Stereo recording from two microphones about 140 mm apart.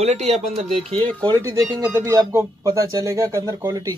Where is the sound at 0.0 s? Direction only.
50° right (ahead or behind).